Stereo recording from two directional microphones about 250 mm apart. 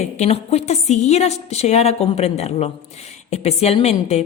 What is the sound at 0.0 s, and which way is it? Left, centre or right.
A woman's voice, left.